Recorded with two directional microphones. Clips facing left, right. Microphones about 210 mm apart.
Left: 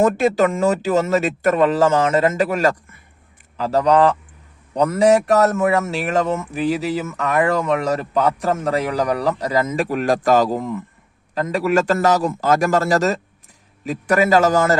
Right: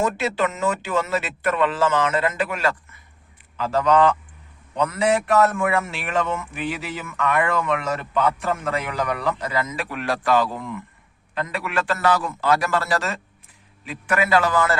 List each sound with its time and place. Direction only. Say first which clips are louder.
0.0 s a man's voice: left 7 dB; 45° left (ahead or behind)